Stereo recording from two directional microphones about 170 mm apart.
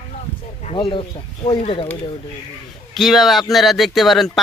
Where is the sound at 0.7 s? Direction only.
30° left (ahead or behind).